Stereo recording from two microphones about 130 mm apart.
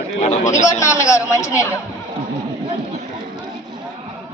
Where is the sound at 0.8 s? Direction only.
25° left (ahead or behind).